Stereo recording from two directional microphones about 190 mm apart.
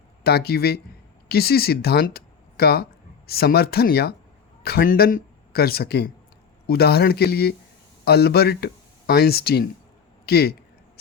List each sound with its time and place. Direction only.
0.3 s speech: 55° left (ahead or behind)